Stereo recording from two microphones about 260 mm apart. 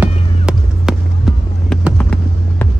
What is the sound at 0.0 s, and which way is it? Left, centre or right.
Music, centre.